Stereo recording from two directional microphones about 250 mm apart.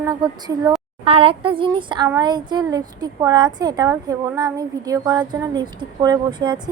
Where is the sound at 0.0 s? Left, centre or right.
Centre.